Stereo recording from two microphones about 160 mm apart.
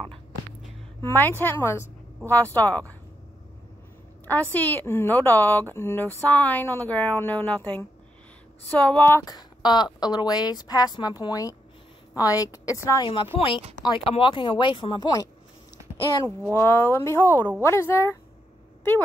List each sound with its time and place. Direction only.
1.0 s a woman's voice: 10° left (ahead or behind)
4.3 s a woman's voice: 10° left (ahead or behind)
13.8 s a woman's voice: 35° left (ahead or behind); by 18.1 s 15° left (ahead or behind)